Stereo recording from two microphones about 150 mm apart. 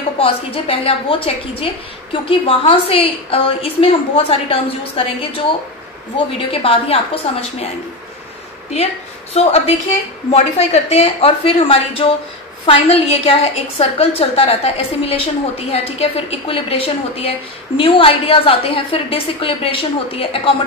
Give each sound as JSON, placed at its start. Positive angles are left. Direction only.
{"t": 0.2, "sound": "a woman's voice", "side_deg": 40}
{"t": 6.1, "sound": "a woman's voice", "side_deg": 40}
{"t": 9.3, "sound": "a woman's voice", "side_deg": 45}